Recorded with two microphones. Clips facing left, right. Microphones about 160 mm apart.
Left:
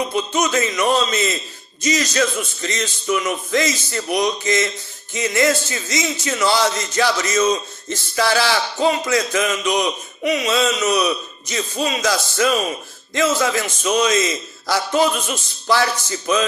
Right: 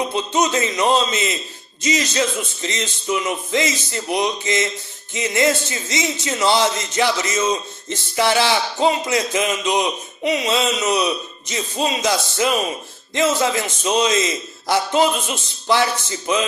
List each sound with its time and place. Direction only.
0.1 s speech: 25° right (ahead or behind)